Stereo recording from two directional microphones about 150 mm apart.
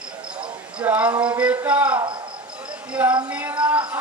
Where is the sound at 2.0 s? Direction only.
25° right (ahead or behind).